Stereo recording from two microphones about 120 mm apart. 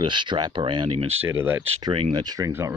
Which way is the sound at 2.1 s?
35° right (ahead or behind).